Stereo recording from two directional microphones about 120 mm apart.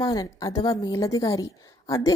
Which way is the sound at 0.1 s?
30° left (ahead or behind).